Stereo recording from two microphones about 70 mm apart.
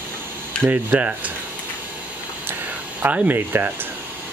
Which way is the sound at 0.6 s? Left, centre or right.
Right.